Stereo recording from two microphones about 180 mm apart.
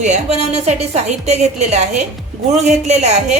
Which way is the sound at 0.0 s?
40° right (ahead or behind).